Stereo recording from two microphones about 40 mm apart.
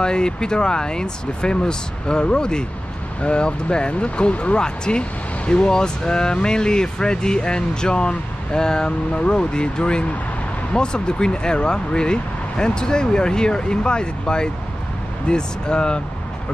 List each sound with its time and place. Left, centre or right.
0.0 s speech: left
4.6 s speech: left